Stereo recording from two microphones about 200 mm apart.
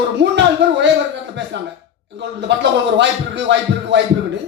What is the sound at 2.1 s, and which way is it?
A man's voice, 60° right (ahead or behind).